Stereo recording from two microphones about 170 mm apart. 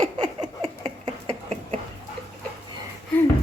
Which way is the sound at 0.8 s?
30° right (ahead or behind).